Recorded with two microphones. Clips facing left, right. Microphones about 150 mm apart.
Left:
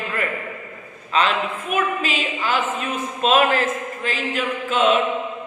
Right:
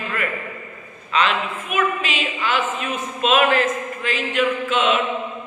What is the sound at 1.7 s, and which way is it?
Speech, 40° left (ahead or behind).